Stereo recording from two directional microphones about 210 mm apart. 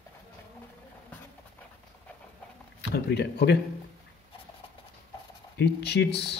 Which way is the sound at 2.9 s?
50° left (ahead or behind).